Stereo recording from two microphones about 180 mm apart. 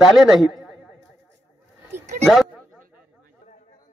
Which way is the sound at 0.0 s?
Centre (ahead or behind).